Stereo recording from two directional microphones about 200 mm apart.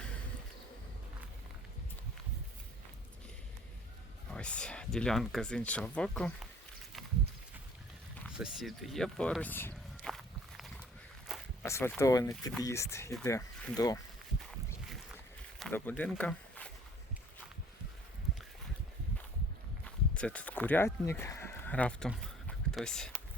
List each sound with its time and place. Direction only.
4.3 s speech: 5° left (ahead or behind)
8.3 s speech: 5° right (ahead or behind)
11.3 s a sound: centre (ahead or behind)
11.6 s speech: 10° left (ahead or behind)
15.5 s speech: 5° left (ahead or behind)
19.8 s a sound: 5° left (ahead or behind)